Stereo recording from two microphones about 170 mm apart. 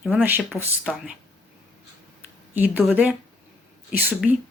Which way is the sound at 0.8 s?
Centre (ahead or behind).